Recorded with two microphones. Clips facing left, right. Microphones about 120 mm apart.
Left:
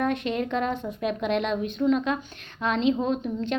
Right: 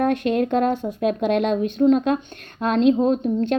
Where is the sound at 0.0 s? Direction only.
50° right (ahead or behind).